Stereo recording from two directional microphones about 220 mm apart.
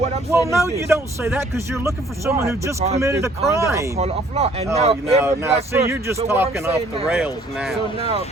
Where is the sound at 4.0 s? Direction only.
30° right (ahead or behind).